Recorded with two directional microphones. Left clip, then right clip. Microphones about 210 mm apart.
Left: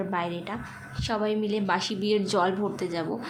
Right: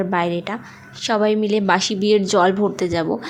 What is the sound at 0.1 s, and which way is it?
A woman's voice, 30° right (ahead or behind).